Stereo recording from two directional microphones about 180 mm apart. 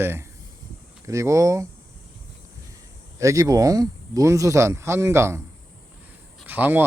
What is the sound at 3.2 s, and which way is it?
Speech, 20° right (ahead or behind).